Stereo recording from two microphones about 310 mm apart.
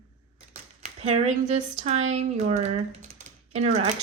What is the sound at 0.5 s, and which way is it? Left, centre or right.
Speech, right.